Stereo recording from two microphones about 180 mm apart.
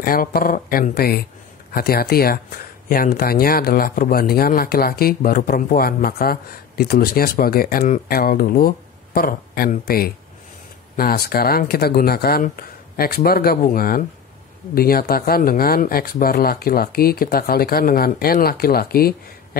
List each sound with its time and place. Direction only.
0.0 s speech: 55° left (ahead or behind)